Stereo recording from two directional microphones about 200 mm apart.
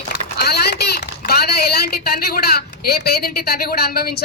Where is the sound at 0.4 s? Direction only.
55° left (ahead or behind).